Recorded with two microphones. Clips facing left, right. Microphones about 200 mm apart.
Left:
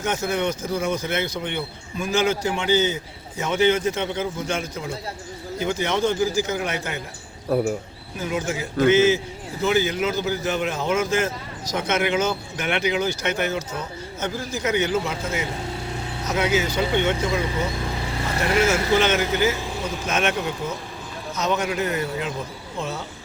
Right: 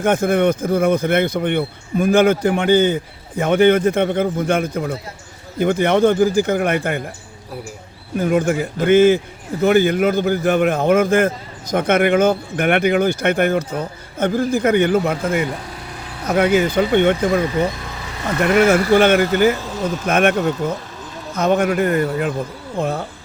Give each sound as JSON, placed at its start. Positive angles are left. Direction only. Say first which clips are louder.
{"t": 0.0, "sound": "a man's voice", "louder": "right 8 dB", "side_deg": -55}
{"t": 8.2, "sound": "a man's voice", "louder": "right 9 dB", "side_deg": -55}